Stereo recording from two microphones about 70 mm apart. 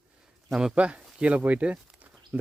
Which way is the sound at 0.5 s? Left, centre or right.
Centre.